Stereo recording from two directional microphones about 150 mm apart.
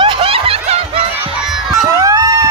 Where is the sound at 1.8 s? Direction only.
20° right (ahead or behind).